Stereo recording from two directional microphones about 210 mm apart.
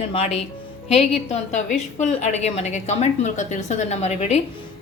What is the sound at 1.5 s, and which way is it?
A woman's voice, 35° left (ahead or behind).